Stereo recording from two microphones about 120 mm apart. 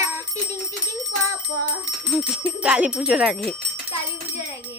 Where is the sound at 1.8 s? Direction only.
10° right (ahead or behind).